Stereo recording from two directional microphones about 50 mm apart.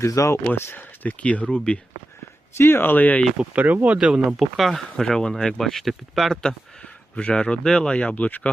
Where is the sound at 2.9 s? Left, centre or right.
Left.